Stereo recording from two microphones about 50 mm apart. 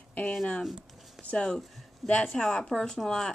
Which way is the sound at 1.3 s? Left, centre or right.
Centre.